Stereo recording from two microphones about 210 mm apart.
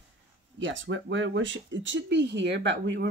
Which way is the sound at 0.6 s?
65° right (ahead or behind).